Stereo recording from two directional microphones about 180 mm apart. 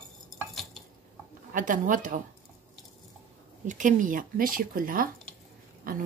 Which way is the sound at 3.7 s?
45° right (ahead or behind).